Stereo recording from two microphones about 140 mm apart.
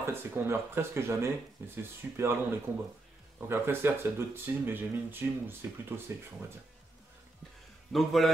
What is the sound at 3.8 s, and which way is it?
Speech, 15° right (ahead or behind).